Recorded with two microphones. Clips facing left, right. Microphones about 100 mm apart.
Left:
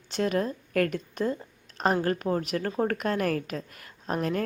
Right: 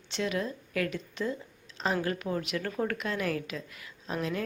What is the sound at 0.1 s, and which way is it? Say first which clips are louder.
A woman's voice: left 5 dB; 45° left (ahead or behind).